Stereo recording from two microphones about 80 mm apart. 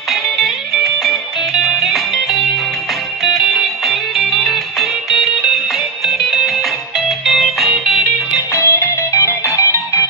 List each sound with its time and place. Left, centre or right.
1.6 s music: centre
8.5 s music: left